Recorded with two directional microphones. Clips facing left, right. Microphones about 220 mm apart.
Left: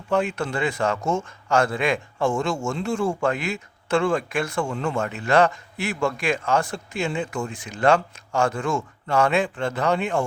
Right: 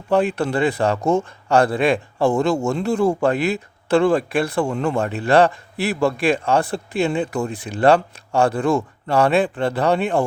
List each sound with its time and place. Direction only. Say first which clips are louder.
0.1 s a man's voice: right 5 dB; 35° right (ahead or behind)